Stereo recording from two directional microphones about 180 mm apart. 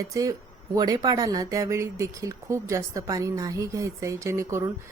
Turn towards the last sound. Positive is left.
turn(degrees=-15)  # may be behind; listen again after turning